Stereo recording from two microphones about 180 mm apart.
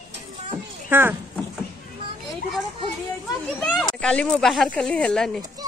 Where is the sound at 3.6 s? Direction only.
5° left (ahead or behind).